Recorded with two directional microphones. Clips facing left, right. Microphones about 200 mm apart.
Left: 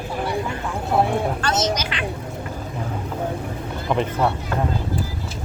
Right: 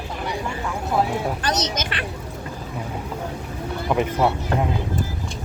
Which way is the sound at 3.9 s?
5° right (ahead or behind).